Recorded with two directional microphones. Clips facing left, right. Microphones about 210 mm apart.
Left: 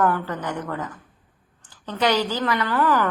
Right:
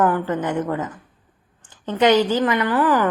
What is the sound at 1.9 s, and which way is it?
A woman's voice, 20° right (ahead or behind).